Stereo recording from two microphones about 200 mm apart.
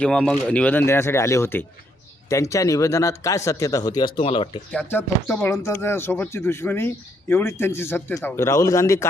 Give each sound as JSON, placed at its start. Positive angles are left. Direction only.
{"t": 0.0, "sound": "speech", "side_deg": 5}
{"t": 4.7, "sound": "speech", "side_deg": 10}